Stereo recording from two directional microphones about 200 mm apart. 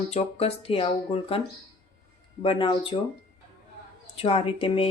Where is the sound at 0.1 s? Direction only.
30° left (ahead or behind).